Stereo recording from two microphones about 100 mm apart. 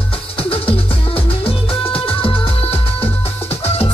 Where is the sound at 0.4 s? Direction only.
70° left (ahead or behind).